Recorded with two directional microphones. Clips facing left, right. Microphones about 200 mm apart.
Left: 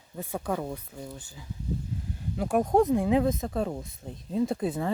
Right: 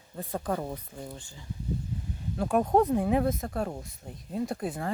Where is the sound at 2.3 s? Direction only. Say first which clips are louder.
Left 1 dB; 10° left (ahead or behind).